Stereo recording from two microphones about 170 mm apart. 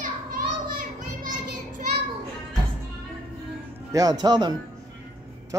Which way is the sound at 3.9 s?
25° right (ahead or behind).